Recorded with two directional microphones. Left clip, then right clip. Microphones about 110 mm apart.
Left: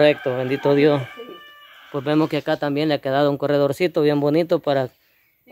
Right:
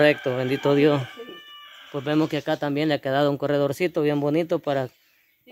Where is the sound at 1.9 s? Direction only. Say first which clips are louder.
Left 4 dB; 20° left (ahead or behind).